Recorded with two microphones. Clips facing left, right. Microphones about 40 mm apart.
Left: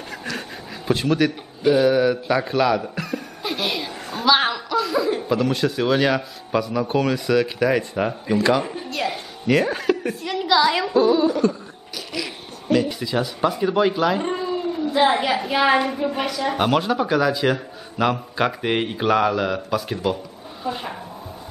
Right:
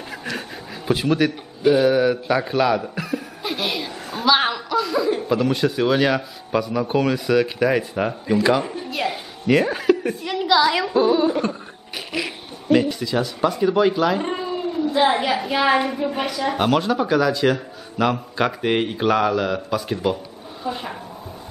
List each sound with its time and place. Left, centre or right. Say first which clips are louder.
0.8 s a man's voice: even; centre; by 12.3 s right
12.8 s a woman's voice: right 1 dB; centre